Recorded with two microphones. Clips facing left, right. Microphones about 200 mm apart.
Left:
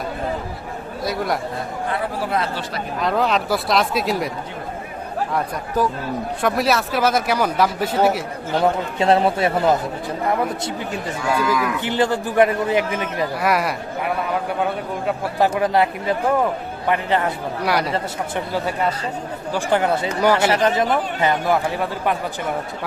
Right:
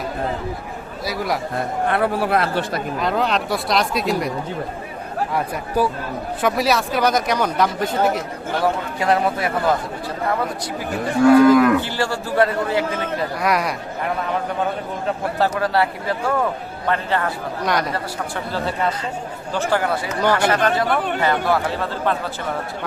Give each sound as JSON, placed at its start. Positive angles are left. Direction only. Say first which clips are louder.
{"t": 1.0, "sound": "speech", "louder": "left 1 dB", "side_deg": 0}
{"t": 1.9, "sound": "speech", "louder": "right 4 dB", "side_deg": -65}
{"t": 3.0, "sound": "speech", "louder": "left 2 dB", "side_deg": 0}
{"t": 5.3, "sound": "speech", "louder": "right 1 dB", "side_deg": -10}
{"t": 8.5, "sound": "speech", "louder": "left 2 dB", "side_deg": 25}
{"t": 11.2, "sound": "speech", "louder": "right 11 dB", "side_deg": -55}
{"t": 11.9, "sound": "a man's voice", "louder": "left 3 dB", "side_deg": 20}
{"t": 13.4, "sound": "speech", "louder": "even", "side_deg": 5}
{"t": 15.0, "sound": "a man's voice", "louder": "left 1 dB", "side_deg": 15}
{"t": 17.6, "sound": "a man's voice", "louder": "left 1 dB", "side_deg": 10}
{"t": 20.2, "sound": "a man's voice", "louder": "left 1 dB", "side_deg": 10}
{"t": 20.5, "sound": "a man's voice", "louder": "left 1 dB", "side_deg": 20}